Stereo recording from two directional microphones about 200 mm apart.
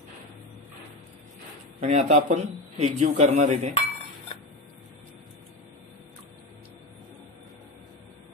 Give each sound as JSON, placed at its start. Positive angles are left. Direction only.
{"t": 1.8, "sound": "a man's voice", "side_deg": -35}